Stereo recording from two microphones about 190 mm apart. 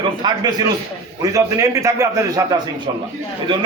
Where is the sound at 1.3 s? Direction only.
15° right (ahead or behind).